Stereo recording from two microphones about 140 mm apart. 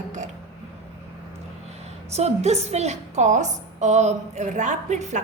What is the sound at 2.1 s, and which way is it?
A woman's voice, 50° right (ahead or behind).